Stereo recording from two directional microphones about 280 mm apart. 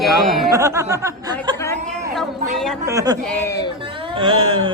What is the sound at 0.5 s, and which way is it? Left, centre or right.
Speech, centre.